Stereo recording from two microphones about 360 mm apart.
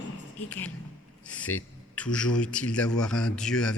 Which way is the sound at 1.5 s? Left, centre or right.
Left.